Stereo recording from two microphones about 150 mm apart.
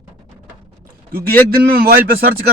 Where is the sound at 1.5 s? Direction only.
85° right.